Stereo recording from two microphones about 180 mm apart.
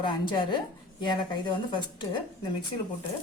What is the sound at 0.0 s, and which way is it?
Speech, 25° left (ahead or behind).